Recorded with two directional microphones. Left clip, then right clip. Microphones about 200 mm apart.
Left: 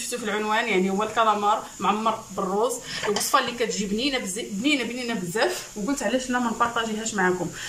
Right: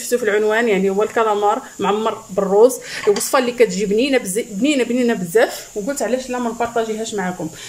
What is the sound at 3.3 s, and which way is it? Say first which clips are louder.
Speech: right 6 dB; 40° right (ahead or behind).